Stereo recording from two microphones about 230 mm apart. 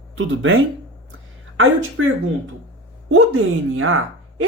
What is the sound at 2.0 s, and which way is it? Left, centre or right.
Speech, right.